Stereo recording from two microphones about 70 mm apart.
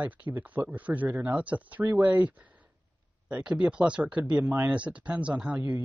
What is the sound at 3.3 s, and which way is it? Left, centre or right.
Speech, centre.